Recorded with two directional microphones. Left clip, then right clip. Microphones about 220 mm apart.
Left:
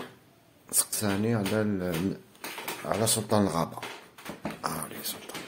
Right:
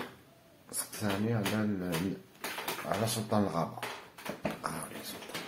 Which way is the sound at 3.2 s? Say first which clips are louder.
Left 4 dB; 55° left (ahead or behind).